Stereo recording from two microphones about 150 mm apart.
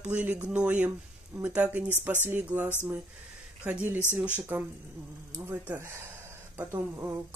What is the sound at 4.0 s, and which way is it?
Speech, 15° left (ahead or behind).